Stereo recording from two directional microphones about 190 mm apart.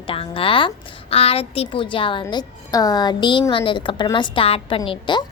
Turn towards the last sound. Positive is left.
turn(degrees=25)  # may be behind; listen again after turning